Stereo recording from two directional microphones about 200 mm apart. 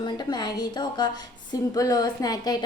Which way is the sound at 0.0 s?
20° left (ahead or behind).